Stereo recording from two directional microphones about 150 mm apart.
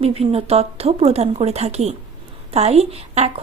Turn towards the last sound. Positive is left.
turn(degrees=-45)  # may be behind; listen again after turning